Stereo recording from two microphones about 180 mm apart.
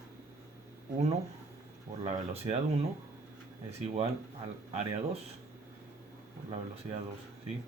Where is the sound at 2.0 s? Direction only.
35° right (ahead or behind).